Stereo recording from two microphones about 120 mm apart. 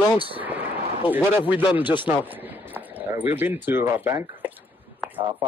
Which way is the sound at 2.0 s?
15° right (ahead or behind).